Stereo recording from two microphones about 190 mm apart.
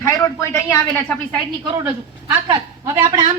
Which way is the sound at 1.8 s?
10° right (ahead or behind).